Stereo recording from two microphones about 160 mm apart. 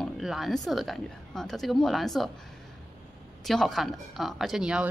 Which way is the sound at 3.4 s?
Centre (ahead or behind).